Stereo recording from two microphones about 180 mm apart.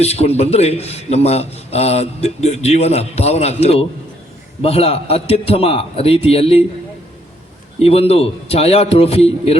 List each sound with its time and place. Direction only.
0.0 s a man's voice: 35° left (ahead or behind)
7.8 s a man's voice: 35° left (ahead or behind)